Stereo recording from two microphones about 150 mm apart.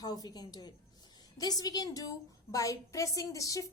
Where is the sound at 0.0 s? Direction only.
25° left (ahead or behind).